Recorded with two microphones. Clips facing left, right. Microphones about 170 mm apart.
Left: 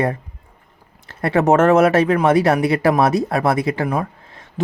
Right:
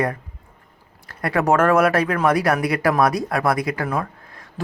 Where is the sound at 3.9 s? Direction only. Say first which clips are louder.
Left 3 dB; 20° left (ahead or behind).